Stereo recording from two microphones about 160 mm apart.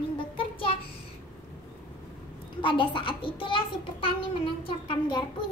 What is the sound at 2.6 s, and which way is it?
A child's voice, 30° left (ahead or behind).